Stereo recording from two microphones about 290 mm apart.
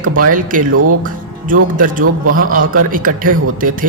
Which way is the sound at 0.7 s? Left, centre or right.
Right.